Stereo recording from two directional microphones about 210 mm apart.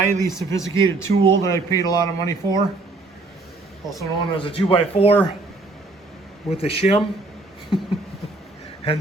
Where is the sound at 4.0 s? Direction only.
25° left (ahead or behind).